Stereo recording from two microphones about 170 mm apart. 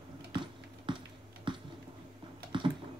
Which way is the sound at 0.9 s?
30° right (ahead or behind).